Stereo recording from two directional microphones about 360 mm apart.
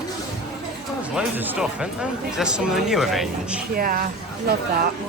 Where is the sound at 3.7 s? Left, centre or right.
Right.